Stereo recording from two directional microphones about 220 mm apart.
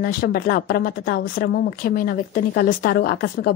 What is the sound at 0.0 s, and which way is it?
A woman's voice, 40° left (ahead or behind).